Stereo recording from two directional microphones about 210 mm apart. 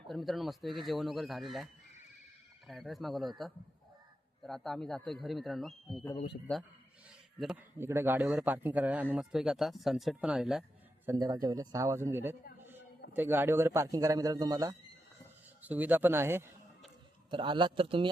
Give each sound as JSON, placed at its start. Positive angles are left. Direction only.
{"t": 0.1, "sound": "a man's voice", "side_deg": 0}
{"t": 7.3, "sound": "a man's voice", "side_deg": -5}
{"t": 11.0, "sound": "speech", "side_deg": -15}
{"t": 17.3, "sound": "speech", "side_deg": -25}